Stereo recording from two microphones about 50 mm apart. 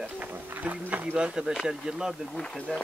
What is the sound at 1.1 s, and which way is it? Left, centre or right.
Speech, centre.